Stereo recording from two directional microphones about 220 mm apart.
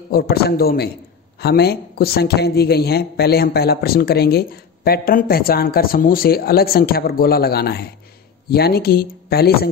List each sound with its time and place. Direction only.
0.1 s a woman's voice: 45° left (ahead or behind)